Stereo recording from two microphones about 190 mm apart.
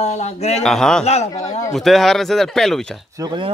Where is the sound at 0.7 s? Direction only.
5° left (ahead or behind).